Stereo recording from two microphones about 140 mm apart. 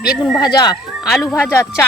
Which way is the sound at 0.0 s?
Centre (ahead or behind).